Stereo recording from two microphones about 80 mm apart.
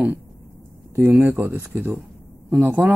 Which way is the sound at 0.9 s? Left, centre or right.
Right.